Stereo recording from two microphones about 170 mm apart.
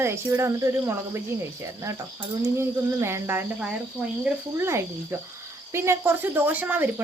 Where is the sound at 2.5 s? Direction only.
15° right (ahead or behind).